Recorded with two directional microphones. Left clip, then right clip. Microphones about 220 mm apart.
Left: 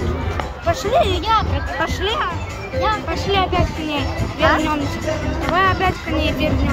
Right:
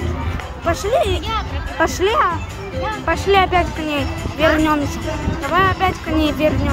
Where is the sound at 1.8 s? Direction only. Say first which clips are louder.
Right 6 dB; 20° right (ahead or behind).